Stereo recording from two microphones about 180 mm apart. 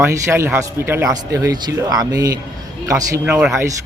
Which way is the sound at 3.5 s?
15° right (ahead or behind).